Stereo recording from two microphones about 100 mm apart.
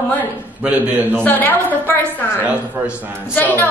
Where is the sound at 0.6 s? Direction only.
15° right (ahead or behind).